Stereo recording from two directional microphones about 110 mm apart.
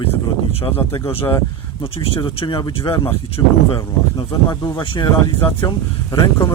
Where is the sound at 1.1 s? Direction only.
55° left (ahead or behind).